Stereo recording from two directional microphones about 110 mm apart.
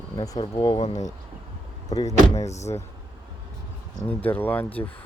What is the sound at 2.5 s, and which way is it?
Speech, 90° left.